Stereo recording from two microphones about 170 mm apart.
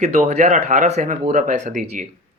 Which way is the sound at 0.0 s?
45° right (ahead or behind).